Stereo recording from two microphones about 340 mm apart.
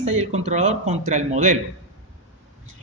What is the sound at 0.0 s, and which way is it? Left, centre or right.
Speech, centre.